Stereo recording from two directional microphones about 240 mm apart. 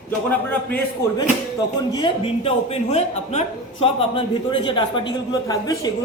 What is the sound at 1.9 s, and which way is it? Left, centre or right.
A man's voice, centre.